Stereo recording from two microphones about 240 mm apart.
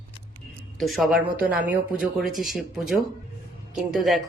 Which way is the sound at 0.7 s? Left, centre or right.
Centre.